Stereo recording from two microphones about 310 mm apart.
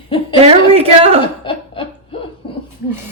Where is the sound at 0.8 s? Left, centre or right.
Centre.